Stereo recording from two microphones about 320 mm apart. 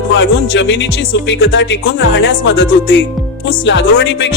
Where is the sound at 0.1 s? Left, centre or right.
Left.